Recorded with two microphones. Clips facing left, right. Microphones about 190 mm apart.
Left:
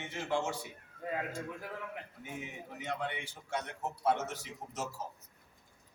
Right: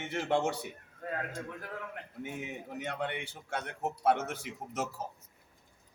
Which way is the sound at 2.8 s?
60° right (ahead or behind).